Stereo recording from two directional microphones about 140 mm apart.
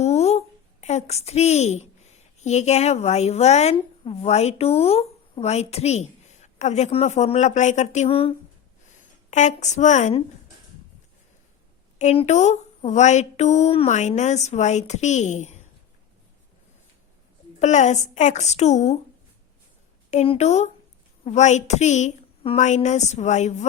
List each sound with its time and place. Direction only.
0.0 s a woman's voice: 50° left (ahead or behind)
9.3 s a woman's voice: 60° left (ahead or behind)
11.9 s a woman's voice: 55° left (ahead or behind)
17.6 s a woman's voice: 60° left (ahead or behind)
20.1 s a woman's voice: 50° left (ahead or behind)